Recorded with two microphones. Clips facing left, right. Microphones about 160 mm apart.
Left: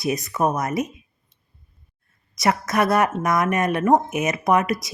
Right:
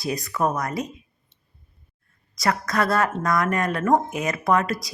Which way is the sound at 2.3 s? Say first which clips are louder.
Left 2 dB; 20° left (ahead or behind).